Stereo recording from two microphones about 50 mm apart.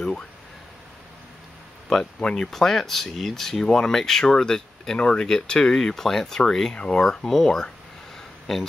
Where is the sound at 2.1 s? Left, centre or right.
Centre.